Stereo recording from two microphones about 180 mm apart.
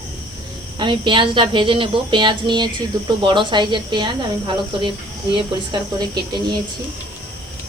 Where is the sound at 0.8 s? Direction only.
25° right (ahead or behind).